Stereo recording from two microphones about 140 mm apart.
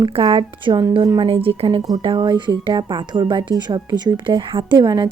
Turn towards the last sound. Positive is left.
turn(degrees=-35)  # may be behind; listen again after turning